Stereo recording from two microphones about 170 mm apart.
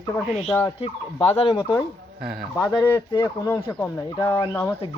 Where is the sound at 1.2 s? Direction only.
35° left (ahead or behind).